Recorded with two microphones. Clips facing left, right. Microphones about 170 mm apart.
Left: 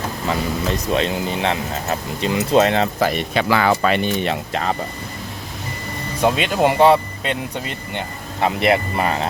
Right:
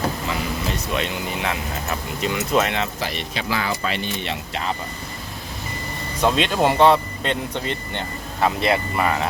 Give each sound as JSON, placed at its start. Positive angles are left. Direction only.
{"t": 0.3, "sound": "speech", "side_deg": 35}
{"t": 3.0, "sound": "speech", "side_deg": 50}
{"t": 3.5, "sound": "speech", "side_deg": 70}
{"t": 6.2, "sound": "speech", "side_deg": 5}
{"t": 8.4, "sound": "speech", "side_deg": 20}